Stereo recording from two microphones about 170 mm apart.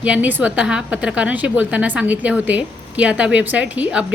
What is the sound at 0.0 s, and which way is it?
A woman's voice, 10° right (ahead or behind).